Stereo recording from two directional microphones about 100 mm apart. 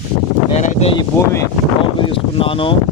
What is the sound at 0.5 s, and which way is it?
Speech, 90° left.